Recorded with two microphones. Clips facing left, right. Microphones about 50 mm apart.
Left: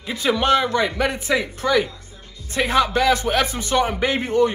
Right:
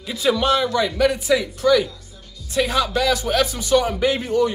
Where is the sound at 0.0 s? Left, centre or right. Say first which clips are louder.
Right 1 dB; left.